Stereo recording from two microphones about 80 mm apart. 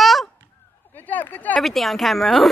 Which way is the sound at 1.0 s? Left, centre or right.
Left.